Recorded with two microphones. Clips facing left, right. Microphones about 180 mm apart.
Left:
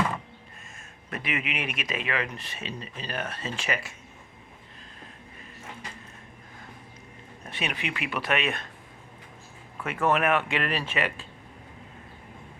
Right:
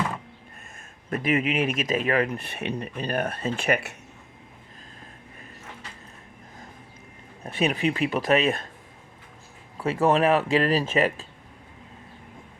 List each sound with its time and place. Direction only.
1.1 s speech: 45° right (ahead or behind); by 3.9 s 60° right (ahead or behind)
7.4 s speech: 35° right (ahead or behind)
9.7 s speech: 35° right (ahead or behind)